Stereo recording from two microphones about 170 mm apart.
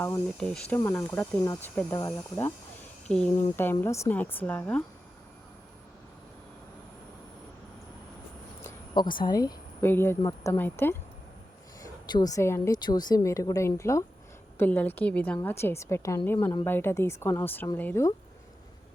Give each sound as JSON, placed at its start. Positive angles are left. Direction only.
{"t": 0.0, "sound": "a woman's voice", "side_deg": 10}
{"t": 3.5, "sound": "a woman's voice", "side_deg": 10}
{"t": 8.6, "sound": "speech", "side_deg": 25}
{"t": 11.8, "sound": "a woman's voice", "side_deg": 25}